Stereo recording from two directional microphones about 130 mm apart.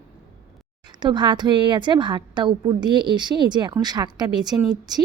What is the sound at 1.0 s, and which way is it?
A woman's voice, 35° right (ahead or behind).